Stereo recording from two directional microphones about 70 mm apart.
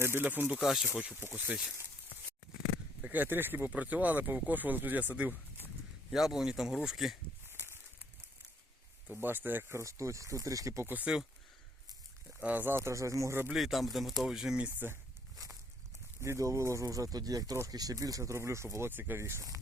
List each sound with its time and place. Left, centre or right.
0.0 s speech: right
0.6 s a man's voice: centre
3.0 s speech: right
6.1 s a man's voice: centre
7.4 s a sound: right
9.0 s speech: right
9.7 s speech: right
10.8 s speech: right
12.4 s speech: right
12.6 s speech: right
13.5 s a man's voice: centre
16.2 s speech: right